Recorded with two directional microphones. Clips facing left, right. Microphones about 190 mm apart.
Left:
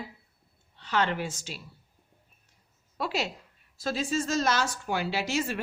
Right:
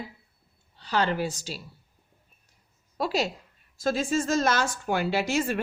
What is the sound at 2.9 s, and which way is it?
A woman's voice, 40° right (ahead or behind).